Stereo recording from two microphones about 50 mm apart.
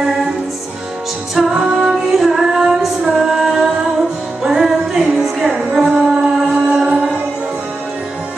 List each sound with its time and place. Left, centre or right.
1.3 s music: centre